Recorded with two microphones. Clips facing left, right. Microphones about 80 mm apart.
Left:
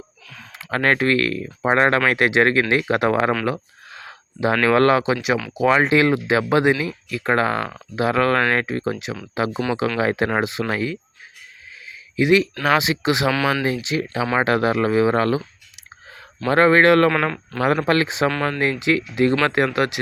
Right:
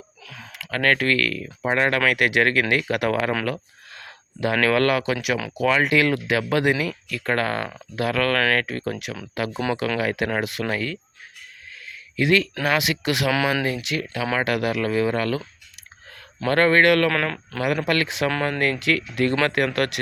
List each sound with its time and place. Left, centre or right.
0.5 s speech: left
11.9 s a sound: centre
12.6 s speech: left
16.5 s speech: centre
17.1 s speech: centre
17.8 s speech: left